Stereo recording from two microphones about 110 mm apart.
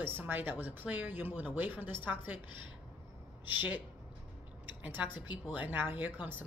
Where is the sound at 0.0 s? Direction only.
20° right (ahead or behind).